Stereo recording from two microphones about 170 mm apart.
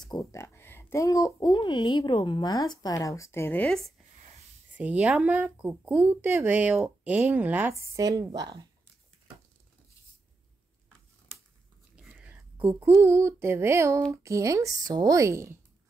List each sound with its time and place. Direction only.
0.0 s speech: 20° left (ahead or behind); by 3.9 s 5° left (ahead or behind)
4.7 s speech: 10° right (ahead or behind); by 8.6 s 25° right (ahead or behind)
11.9 s speech: 10° right (ahead or behind)